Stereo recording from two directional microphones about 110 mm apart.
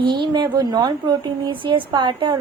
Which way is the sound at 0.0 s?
45° right (ahead or behind).